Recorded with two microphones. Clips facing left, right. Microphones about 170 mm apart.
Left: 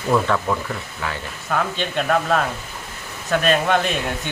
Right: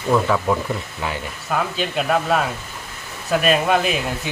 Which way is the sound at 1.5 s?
5° right (ahead or behind).